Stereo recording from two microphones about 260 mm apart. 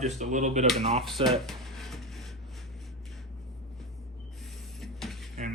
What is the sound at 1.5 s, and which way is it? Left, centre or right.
Music, centre.